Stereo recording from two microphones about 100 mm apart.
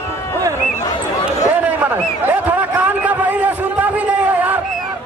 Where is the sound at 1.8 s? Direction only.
15° right (ahead or behind).